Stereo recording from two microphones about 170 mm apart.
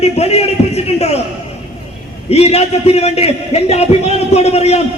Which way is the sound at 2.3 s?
35° left (ahead or behind).